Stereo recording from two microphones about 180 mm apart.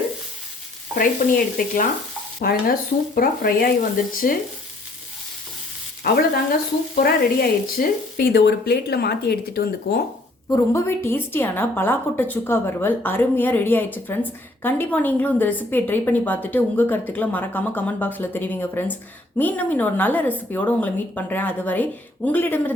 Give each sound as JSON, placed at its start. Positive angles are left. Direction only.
{"t": 1.2, "sound": "speech", "side_deg": 50}
{"t": 6.0, "sound": "speech", "side_deg": 55}
{"t": 10.5, "sound": "a woman's voice", "side_deg": 15}